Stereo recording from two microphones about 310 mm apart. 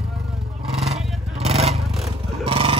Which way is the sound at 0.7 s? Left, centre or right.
Centre.